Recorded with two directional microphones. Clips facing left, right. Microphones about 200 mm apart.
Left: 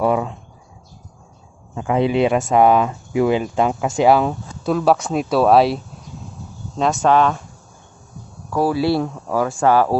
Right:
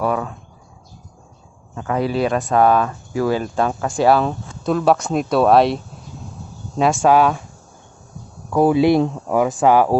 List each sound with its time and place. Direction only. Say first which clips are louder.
0.0 s speech: left 3 dB; 20° left (ahead or behind)
1.8 s speech: left 3 dB; 15° left (ahead or behind)
6.8 s speech: right 1 dB; 10° right (ahead or behind)
8.5 s speech: right 4 dB; 20° right (ahead or behind)